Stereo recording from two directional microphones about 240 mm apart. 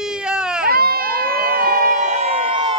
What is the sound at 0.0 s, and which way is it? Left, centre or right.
Baby cry, centre.